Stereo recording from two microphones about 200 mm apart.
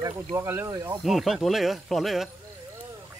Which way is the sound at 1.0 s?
Centre (ahead or behind).